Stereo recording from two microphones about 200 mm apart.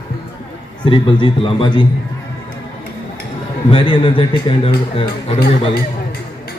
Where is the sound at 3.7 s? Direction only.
25° left (ahead or behind).